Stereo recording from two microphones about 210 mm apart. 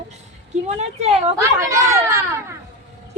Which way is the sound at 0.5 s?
30° right (ahead or behind).